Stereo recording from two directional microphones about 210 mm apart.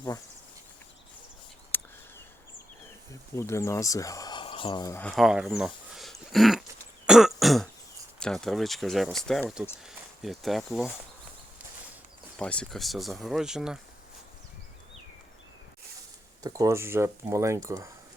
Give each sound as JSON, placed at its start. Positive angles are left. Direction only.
{"t": 1.7, "sound": "a sound", "side_deg": 10}
{"t": 3.1, "sound": "speech", "side_deg": 15}
{"t": 5.1, "sound": "speech", "side_deg": -5}
{"t": 7.1, "sound": "throat clearing", "side_deg": 0}
{"t": 8.2, "sound": "speech", "side_deg": 0}
{"t": 12.4, "sound": "speech", "side_deg": 5}
{"t": 16.4, "sound": "speech", "side_deg": -15}